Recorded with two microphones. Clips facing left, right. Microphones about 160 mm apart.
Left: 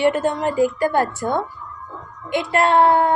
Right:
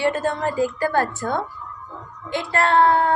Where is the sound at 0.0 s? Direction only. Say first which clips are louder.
Left 3 dB; 15° left (ahead or behind).